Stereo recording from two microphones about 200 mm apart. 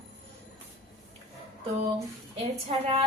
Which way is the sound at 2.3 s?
30° right (ahead or behind).